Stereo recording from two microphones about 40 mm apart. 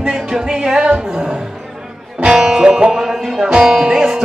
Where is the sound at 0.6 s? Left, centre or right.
Centre.